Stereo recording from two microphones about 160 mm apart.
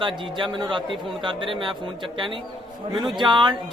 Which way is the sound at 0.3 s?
30° right (ahead or behind).